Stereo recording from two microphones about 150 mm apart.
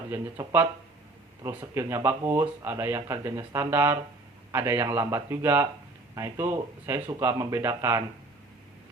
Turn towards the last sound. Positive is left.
turn(degrees=-15)  # may be behind; listen again after turning